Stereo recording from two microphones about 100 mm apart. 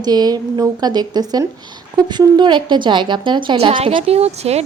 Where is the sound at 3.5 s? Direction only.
85° right.